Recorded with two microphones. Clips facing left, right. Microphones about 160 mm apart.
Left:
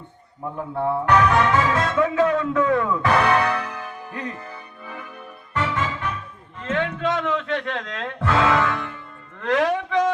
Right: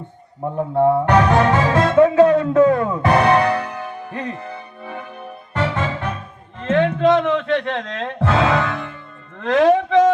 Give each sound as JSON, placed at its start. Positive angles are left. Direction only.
{"t": 0.6, "sound": "music", "side_deg": -35}
{"t": 6.6, "sound": "speech", "side_deg": -35}